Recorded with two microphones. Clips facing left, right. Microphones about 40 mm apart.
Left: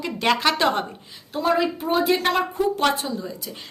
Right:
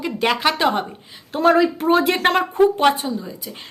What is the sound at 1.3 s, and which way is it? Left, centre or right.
Speech, right.